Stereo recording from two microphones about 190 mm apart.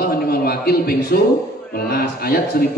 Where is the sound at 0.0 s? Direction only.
55° left (ahead or behind).